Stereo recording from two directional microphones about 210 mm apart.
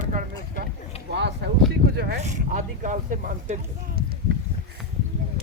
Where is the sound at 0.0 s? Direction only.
35° right (ahead or behind).